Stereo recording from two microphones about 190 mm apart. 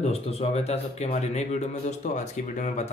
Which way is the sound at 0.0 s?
30° left (ahead or behind).